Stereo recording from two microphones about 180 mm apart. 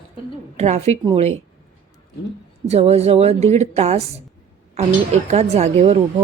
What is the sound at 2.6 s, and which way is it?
Speech, 35° right (ahead or behind).